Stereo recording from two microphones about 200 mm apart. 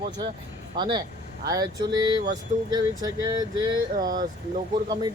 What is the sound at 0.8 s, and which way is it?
Speech, 20° right (ahead or behind).